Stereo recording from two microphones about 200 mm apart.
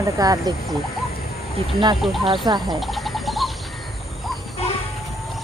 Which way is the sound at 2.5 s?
20° right (ahead or behind).